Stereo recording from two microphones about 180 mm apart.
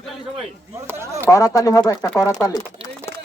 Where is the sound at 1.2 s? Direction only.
15° left (ahead or behind).